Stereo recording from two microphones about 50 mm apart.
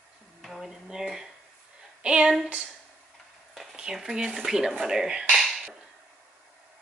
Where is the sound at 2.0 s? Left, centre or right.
Right.